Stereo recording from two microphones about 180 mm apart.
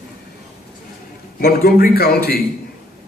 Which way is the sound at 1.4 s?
55° left (ahead or behind).